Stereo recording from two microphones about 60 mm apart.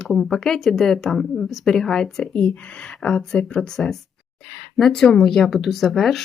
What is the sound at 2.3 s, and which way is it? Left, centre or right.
A woman's voice, centre.